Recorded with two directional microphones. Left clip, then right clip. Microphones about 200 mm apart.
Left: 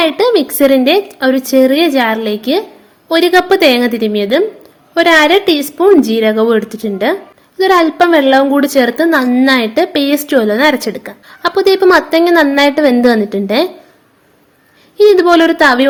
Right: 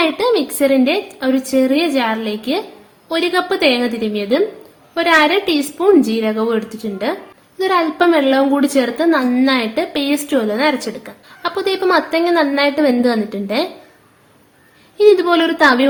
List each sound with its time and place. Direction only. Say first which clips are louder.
0.0 s a woman's voice: left 5 dB; 35° left (ahead or behind)
14.9 s a woman's voice: left 4 dB; 30° left (ahead or behind)